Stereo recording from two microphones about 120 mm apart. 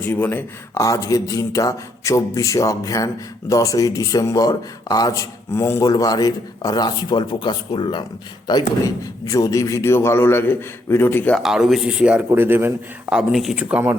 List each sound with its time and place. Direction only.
0.0 s speech: 20° left (ahead or behind)
11.3 s speech: 5° right (ahead or behind)
13.1 s speech: centre (ahead or behind)